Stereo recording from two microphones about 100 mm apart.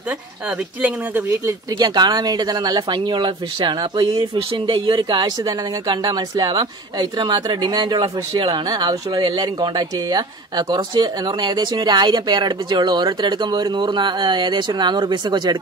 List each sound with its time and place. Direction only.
1.3 s a woman's voice: 35° right (ahead or behind)
4.4 s a woman's voice: 60° right (ahead or behind)